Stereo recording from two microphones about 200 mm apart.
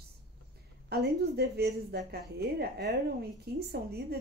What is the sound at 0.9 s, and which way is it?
A woman's voice, 50° right (ahead or behind).